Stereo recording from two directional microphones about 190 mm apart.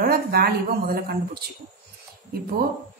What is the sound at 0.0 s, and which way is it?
A woman's voice, 50° right (ahead or behind).